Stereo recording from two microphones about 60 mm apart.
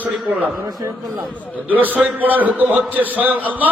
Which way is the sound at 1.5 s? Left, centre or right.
Right.